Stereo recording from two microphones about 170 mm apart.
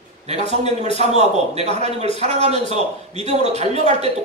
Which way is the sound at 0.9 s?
40° right (ahead or behind).